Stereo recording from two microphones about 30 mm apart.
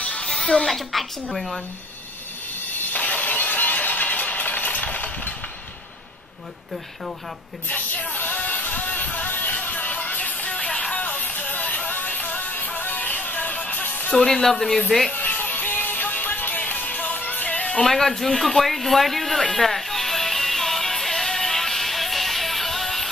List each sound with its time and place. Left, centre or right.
0.0 s a sound: left
0.3 s a sound: left
0.7 s a woman's voice: centre
3.0 s a sound: left
7.6 s music: left
10.5 s music: left
11.0 s music: left
14.1 s speech: centre
15.1 s music: left
17.6 s music: left
17.8 s a woman's voice: centre
19.5 s music: centre